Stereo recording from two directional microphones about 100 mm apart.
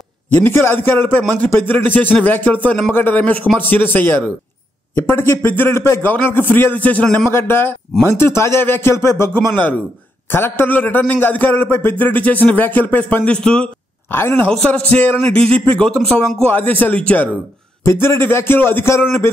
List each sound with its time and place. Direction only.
0.3 s speech: 20° left (ahead or behind)
7.2 s speech: 25° left (ahead or behind); by 13.7 s 10° left (ahead or behind)
14.1 s speech: 20° left (ahead or behind)
14.5 s speech: 10° left (ahead or behind)
17.8 s speech: 25° left (ahead or behind)